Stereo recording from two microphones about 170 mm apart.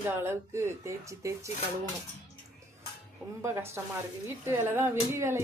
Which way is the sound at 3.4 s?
15° right (ahead or behind).